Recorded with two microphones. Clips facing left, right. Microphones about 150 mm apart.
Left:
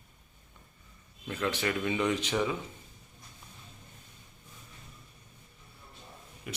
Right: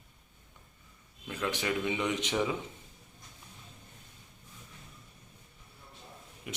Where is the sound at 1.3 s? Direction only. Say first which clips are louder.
Left 2 dB; 10° right (ahead or behind).